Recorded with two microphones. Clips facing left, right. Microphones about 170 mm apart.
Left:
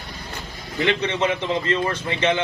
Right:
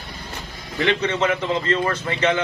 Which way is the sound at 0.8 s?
20° left (ahead or behind).